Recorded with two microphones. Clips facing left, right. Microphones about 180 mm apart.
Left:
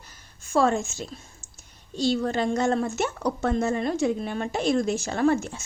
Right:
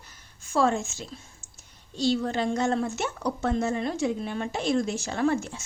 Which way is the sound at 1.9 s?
45° left (ahead or behind).